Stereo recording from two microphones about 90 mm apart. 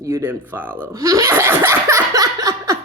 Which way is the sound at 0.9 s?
40° right (ahead or behind).